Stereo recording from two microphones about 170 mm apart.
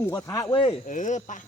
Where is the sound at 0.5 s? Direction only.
30° left (ahead or behind).